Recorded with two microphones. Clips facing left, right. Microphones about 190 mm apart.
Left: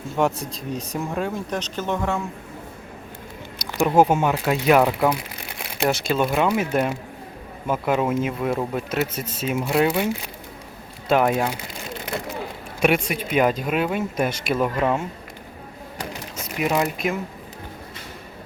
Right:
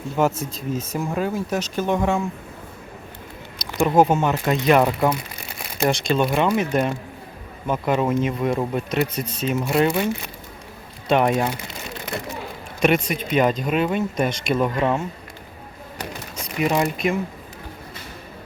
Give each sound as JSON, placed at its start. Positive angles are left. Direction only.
{"t": 0.2, "sound": "speech", "side_deg": 0}
{"t": 3.8, "sound": "speech", "side_deg": 5}
{"t": 11.1, "sound": "speech", "side_deg": 5}
{"t": 12.8, "sound": "speech", "side_deg": 5}
{"t": 16.6, "sound": "speech", "side_deg": 5}